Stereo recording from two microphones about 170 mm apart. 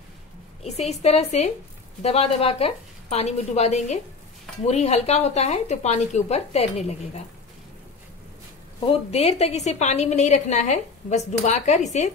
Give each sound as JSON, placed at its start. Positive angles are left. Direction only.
{"t": 0.7, "sound": "a woman's voice", "side_deg": 40}
{"t": 8.9, "sound": "a woman's voice", "side_deg": 35}